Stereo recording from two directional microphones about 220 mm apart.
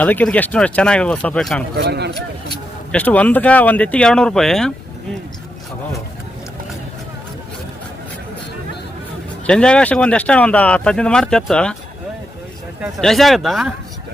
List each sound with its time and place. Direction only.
0.0 s speech: 5° left (ahead or behind)
1.7 s speech: 50° right (ahead or behind)
2.9 s speech: 5° left (ahead or behind)
9.5 s speech: 5° left (ahead or behind)
13.0 s speech: centre (ahead or behind)